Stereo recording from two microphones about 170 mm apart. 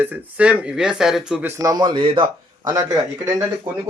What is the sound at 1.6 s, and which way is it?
A man's voice, 25° right (ahead or behind).